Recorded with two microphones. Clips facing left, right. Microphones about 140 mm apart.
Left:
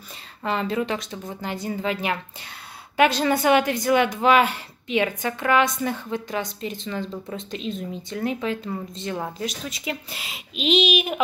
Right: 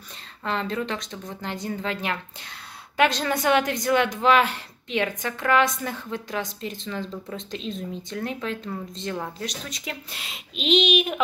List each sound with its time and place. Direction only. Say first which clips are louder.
0.4 s speech: left 3 dB; 5° left (ahead or behind)